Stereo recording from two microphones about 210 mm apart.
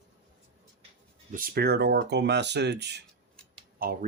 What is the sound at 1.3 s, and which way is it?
Speech, 40° right (ahead or behind).